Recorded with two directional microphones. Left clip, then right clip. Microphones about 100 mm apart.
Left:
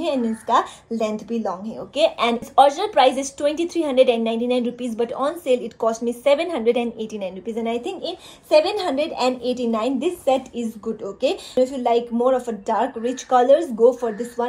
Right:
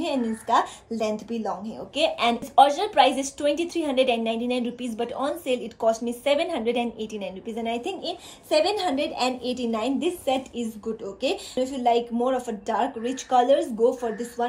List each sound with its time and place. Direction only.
0.0 s a woman's voice: 25° right (ahead or behind)